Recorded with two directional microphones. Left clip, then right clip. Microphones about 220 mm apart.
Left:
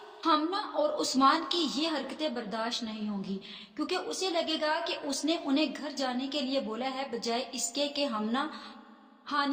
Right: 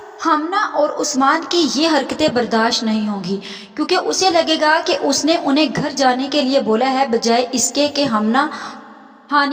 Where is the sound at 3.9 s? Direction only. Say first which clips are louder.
Right 18 dB; 45° right (ahead or behind).